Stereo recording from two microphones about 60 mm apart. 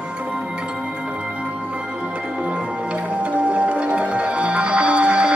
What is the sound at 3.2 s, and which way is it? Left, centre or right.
Music, centre.